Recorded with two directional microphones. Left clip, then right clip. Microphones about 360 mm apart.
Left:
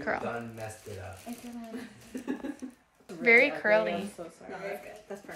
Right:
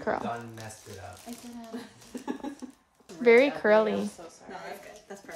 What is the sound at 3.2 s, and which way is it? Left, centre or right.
Speech, centre.